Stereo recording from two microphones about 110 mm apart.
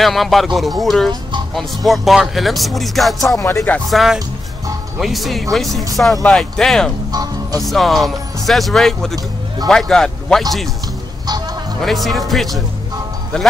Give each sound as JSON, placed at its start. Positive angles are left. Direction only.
{"t": 0.0, "sound": "speech", "side_deg": 0}
{"t": 3.3, "sound": "music", "side_deg": 30}
{"t": 3.9, "sound": "speech", "side_deg": 0}
{"t": 7.1, "sound": "music", "side_deg": -35}
{"t": 7.6, "sound": "speech", "side_deg": 0}
{"t": 11.8, "sound": "speech", "side_deg": 0}